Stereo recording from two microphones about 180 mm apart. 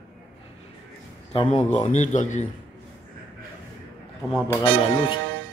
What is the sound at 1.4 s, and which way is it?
A man's voice, 40° left (ahead or behind).